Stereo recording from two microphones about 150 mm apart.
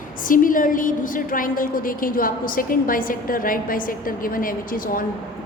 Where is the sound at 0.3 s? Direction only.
65° left (ahead or behind).